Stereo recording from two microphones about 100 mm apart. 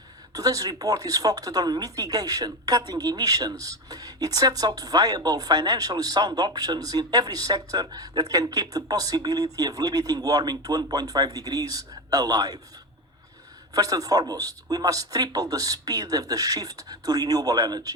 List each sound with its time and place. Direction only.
0.3 s speech: 35° right (ahead or behind)
13.7 s speech: 40° right (ahead or behind)